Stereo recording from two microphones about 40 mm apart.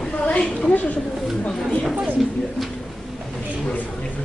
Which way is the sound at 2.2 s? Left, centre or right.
Centre.